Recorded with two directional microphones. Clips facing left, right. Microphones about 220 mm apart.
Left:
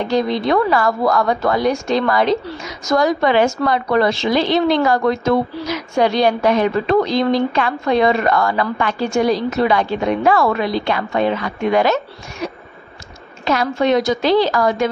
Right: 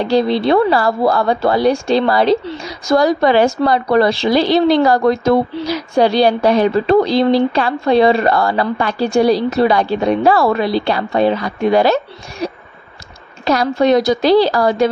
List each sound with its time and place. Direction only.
0.0 s a woman's voice: 30° right (ahead or behind)
13.5 s a woman's voice: 40° right (ahead or behind)